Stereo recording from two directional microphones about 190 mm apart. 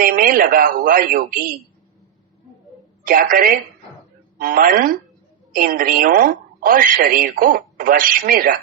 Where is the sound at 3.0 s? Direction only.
50° right (ahead or behind).